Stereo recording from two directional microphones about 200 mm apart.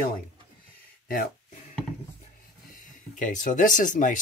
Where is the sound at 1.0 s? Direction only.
45° left (ahead or behind).